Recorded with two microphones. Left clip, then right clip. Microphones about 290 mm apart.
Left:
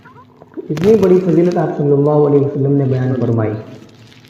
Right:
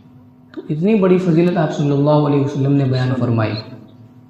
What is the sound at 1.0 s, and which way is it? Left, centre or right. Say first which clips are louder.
Speech: left 3 dB; right.